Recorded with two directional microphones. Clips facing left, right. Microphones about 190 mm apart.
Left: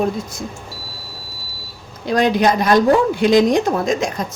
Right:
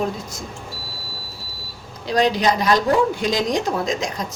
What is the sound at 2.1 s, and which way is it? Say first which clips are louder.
A woman's voice: left 3 dB; 55° left (ahead or behind).